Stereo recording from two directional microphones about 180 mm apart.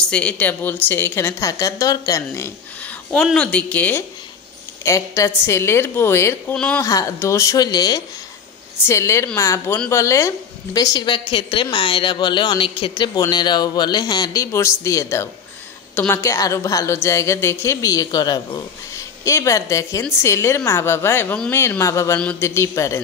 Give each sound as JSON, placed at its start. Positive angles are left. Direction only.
{"t": 0.0, "sound": "a woman's voice", "side_deg": 5}
{"t": 6.8, "sound": "a woman's voice", "side_deg": 20}